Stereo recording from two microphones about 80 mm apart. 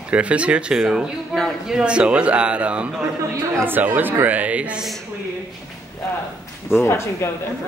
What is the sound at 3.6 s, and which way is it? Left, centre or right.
Speech, right.